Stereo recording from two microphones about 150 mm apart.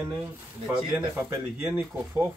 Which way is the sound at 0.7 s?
15° right (ahead or behind).